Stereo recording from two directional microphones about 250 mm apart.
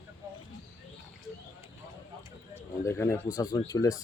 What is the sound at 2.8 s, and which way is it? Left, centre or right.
Speech, centre.